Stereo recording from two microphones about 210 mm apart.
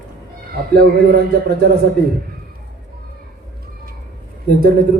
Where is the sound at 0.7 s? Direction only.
50° right (ahead or behind).